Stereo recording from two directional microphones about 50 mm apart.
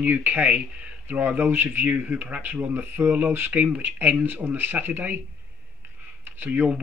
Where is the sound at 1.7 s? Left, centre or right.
Right.